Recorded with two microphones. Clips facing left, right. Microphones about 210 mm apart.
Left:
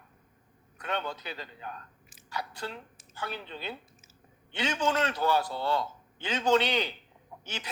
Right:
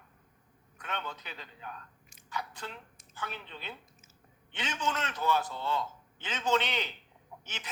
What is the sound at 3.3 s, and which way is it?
A man's voice, 35° left (ahead or behind).